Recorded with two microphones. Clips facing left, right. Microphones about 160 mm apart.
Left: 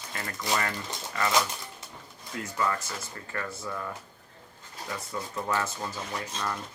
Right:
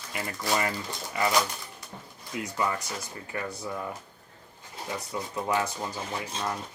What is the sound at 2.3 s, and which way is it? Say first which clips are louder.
Speech: even; 15° right (ahead or behind).